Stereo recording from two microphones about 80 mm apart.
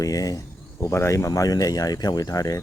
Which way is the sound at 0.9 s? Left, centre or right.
Left.